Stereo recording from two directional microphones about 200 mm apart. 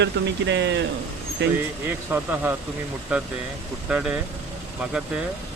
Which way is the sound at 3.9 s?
5° right (ahead or behind).